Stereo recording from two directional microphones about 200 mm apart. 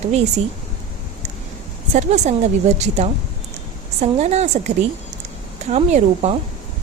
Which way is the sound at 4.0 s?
35° right (ahead or behind).